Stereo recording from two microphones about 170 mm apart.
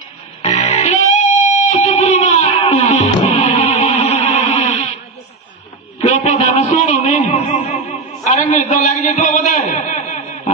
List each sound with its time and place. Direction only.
0.4 s music: 40° left (ahead or behind)
6.0 s music: 45° left (ahead or behind)